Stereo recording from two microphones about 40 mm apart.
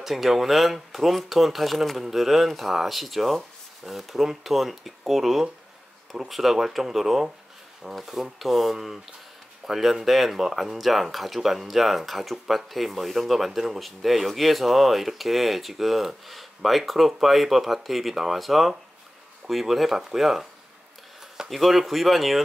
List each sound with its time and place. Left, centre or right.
0.0 s speech: centre
21.5 s speech: centre